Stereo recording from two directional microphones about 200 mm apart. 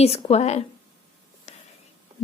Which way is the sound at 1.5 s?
30° left (ahead or behind).